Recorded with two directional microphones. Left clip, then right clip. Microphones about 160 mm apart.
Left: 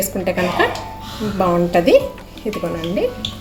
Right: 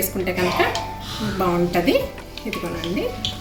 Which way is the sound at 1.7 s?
55° left (ahead or behind).